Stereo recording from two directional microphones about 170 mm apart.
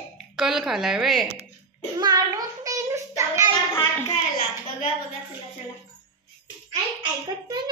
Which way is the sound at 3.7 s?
15° left (ahead or behind).